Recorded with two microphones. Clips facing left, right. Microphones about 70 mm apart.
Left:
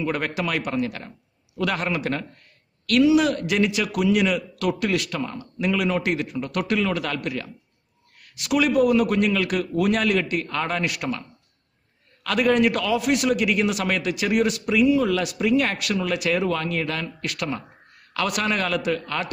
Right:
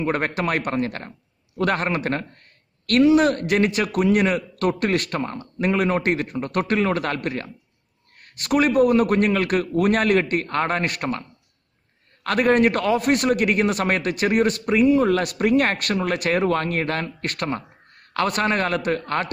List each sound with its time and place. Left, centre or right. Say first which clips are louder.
0.0 s a man's voice: right 2 dB; right